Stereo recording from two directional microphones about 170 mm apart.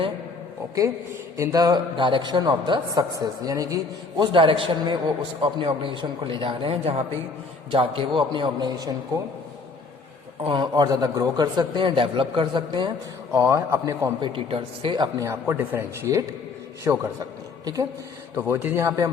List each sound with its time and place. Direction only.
1.4 s a man's voice: 20° right (ahead or behind)
10.4 s a man's voice: 30° right (ahead or behind)
13.3 s a man's voice: 15° right (ahead or behind)
18.3 s a man's voice: 15° right (ahead or behind)